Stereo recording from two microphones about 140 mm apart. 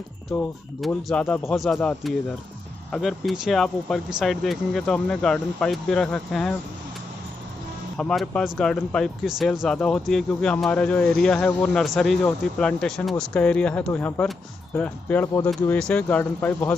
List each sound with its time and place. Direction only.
0.7 s speech: centre (ahead or behind)
8.0 s speech: 5° left (ahead or behind)